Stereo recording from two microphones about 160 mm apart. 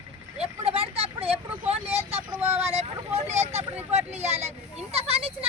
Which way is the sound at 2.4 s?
45° right (ahead or behind).